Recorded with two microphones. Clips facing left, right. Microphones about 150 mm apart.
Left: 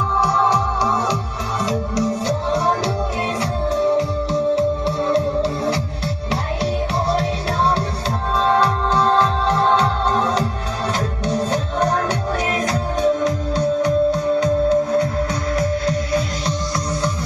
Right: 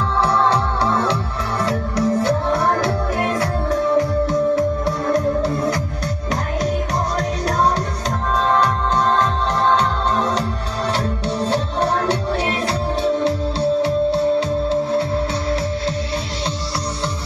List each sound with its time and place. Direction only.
0.5 s music: 60° right (ahead or behind)
3.2 s music: 20° left (ahead or behind)
3.9 s music: 50° right (ahead or behind)
8.4 s music: 35° left (ahead or behind)
9.5 s music: 40° right (ahead or behind)
13.0 s music: 30° right (ahead or behind)